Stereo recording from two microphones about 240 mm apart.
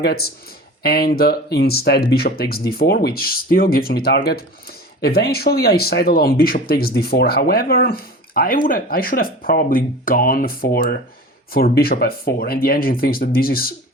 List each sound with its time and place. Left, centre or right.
0.0 s speech: left